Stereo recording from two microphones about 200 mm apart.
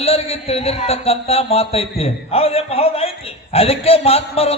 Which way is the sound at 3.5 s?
30° left (ahead or behind).